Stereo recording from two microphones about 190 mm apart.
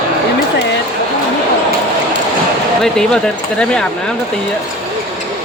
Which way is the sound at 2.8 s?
5° left (ahead or behind).